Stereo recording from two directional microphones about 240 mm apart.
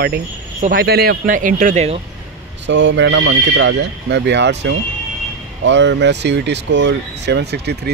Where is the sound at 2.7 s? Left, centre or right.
Right.